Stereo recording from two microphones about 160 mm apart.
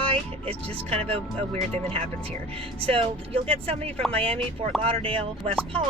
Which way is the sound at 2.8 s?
35° right (ahead or behind).